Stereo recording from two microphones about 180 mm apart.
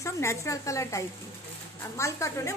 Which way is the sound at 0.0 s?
15° left (ahead or behind).